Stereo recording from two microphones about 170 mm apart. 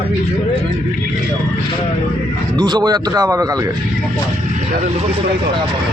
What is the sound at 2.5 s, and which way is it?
Speech, 25° right (ahead or behind).